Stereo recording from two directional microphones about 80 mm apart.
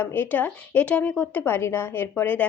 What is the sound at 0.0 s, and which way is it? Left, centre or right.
Speech, left.